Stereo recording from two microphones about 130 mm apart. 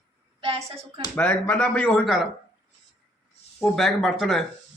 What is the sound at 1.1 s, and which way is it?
Speech, 15° left (ahead or behind).